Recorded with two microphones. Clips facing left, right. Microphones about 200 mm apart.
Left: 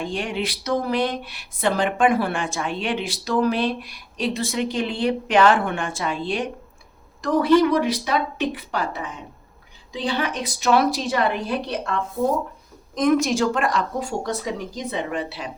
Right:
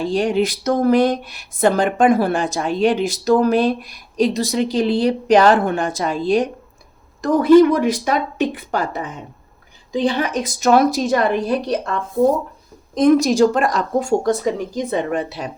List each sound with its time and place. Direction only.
0.0 s a woman's voice: 40° right (ahead or behind)